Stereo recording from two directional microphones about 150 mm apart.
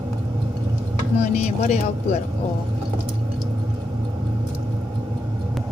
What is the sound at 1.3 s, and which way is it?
Speech, 50° left (ahead or behind).